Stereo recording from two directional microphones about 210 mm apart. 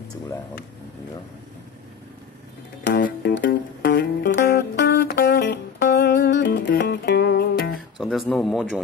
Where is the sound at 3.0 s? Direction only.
50° left (ahead or behind).